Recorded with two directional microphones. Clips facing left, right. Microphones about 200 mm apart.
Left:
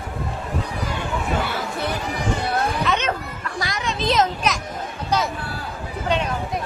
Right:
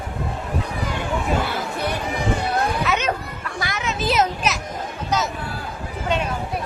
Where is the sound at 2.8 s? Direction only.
10° right (ahead or behind).